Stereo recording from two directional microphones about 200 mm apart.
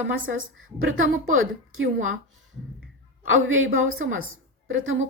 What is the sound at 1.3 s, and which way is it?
Speech, 90° right.